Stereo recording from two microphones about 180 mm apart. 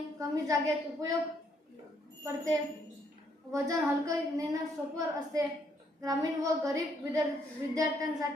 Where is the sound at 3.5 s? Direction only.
20° right (ahead or behind).